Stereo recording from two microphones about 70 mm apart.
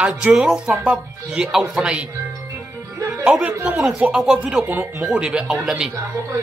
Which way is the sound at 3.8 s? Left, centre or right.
Centre.